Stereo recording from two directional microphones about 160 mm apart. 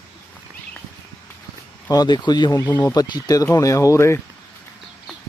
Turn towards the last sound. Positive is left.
turn(degrees=15)  # may be behind; listen again after turning